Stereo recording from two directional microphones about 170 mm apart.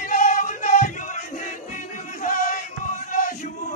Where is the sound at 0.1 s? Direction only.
50° left (ahead or behind).